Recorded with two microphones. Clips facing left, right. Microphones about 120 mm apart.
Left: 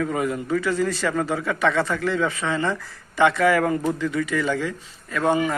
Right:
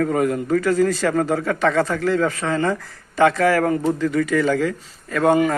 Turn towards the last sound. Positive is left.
turn(degrees=-45)  # may be behind; listen again after turning